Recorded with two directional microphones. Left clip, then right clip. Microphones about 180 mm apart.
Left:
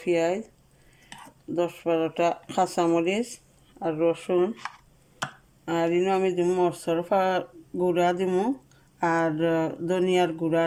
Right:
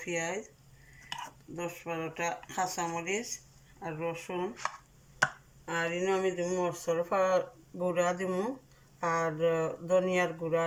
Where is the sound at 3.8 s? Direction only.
85° left.